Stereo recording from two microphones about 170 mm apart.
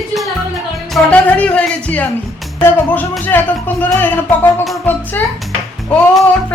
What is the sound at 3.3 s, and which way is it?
Music, 10° left (ahead or behind).